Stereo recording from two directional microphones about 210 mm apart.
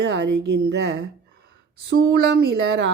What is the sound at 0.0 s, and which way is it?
Speech, 55° right (ahead or behind).